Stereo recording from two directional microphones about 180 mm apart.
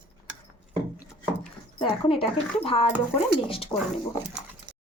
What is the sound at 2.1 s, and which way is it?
Speech, 30° left (ahead or behind).